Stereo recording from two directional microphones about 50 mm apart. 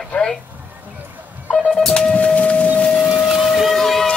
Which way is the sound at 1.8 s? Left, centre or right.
Centre.